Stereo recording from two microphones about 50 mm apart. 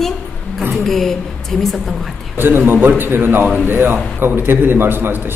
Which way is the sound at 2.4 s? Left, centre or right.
Right.